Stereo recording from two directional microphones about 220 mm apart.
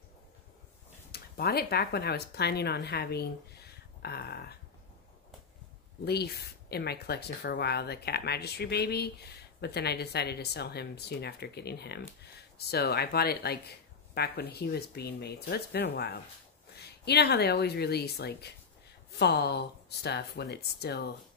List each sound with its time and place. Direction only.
1.1 s speech: 45° left (ahead or behind)
6.0 s speech: 45° left (ahead or behind)